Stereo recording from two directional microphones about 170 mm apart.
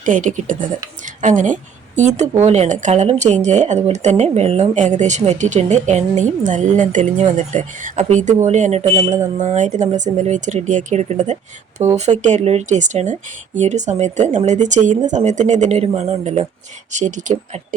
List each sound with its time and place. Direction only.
0.0 s a woman's voice: 50° right (ahead or behind)